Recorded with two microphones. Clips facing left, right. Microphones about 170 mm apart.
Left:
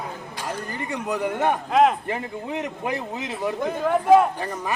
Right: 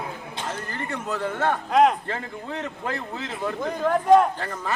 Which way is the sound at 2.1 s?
15° left (ahead or behind).